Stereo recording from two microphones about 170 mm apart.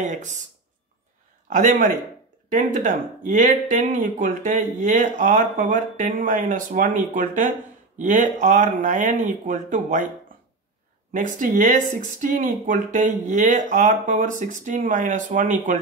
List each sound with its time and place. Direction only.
0.0 s speech: 45° right (ahead or behind)
1.5 s speech: 50° right (ahead or behind)
11.1 s speech: 50° right (ahead or behind)